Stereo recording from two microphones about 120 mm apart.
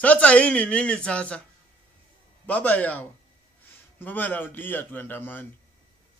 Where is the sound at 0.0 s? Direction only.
10° left (ahead or behind).